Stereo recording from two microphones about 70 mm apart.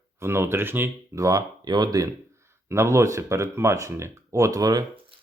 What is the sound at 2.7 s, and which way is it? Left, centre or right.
Speech, right.